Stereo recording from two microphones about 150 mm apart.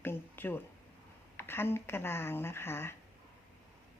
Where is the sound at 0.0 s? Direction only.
15° left (ahead or behind).